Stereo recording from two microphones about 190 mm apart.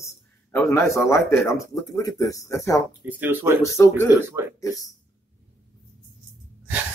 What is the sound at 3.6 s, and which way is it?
Speech, 15° left (ahead or behind).